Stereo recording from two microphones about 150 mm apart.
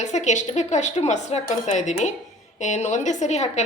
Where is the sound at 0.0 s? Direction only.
50° left (ahead or behind).